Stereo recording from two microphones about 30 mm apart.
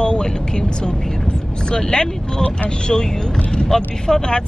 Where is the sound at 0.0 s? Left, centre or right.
Left.